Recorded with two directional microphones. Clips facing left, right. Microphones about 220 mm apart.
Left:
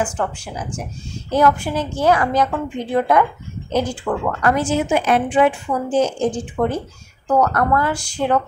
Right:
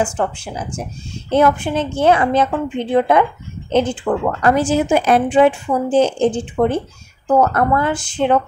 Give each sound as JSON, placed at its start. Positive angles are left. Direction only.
{"t": 1.3, "sound": "speech", "side_deg": -25}